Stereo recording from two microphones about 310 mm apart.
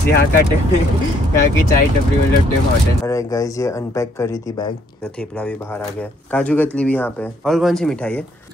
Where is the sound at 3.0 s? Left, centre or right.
Centre.